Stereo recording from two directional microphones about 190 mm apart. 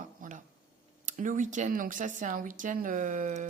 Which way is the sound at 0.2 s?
40° right (ahead or behind).